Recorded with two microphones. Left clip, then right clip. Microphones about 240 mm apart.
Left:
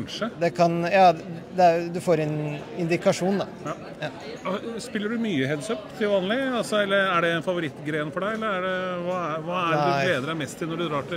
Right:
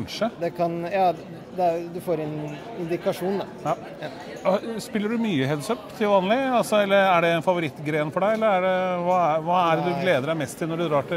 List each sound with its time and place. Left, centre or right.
0.4 s a man's voice: left
2.9 s speech: left
4.5 s speech: right
9.8 s speech: left
10.0 s speech: right